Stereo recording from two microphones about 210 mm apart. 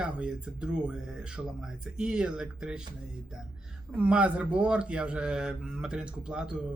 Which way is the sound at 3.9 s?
5° right (ahead or behind).